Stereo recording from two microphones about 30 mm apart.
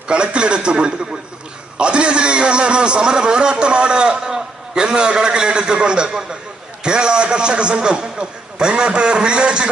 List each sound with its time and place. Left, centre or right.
0.1 s a man's voice: right